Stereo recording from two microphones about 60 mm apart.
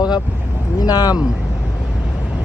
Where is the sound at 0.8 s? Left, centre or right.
Left.